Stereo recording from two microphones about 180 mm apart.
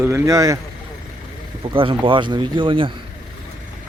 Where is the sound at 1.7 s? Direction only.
30° right (ahead or behind).